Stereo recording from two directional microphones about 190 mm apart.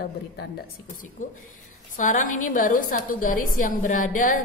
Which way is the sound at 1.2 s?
45° left (ahead or behind).